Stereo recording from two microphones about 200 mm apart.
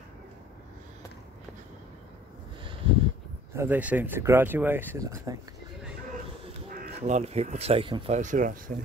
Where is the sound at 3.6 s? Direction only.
10° right (ahead or behind).